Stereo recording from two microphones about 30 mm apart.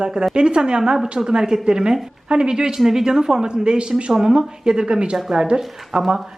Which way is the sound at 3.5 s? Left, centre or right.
Right.